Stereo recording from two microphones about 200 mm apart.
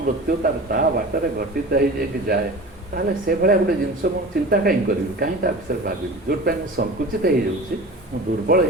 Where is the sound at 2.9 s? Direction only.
50° right (ahead or behind).